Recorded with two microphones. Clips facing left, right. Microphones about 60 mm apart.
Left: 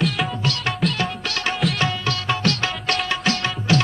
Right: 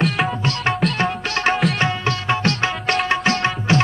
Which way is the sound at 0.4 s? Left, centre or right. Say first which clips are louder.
Right 3 dB; right.